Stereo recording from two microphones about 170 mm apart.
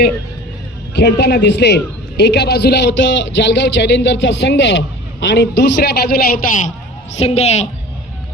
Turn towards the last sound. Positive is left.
turn(degrees=40)  # may be behind; listen again after turning